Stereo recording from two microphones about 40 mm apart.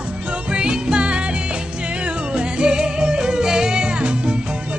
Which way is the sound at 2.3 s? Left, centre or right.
Right.